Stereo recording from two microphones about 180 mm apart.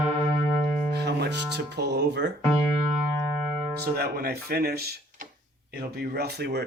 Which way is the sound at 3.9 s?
60° right (ahead or behind).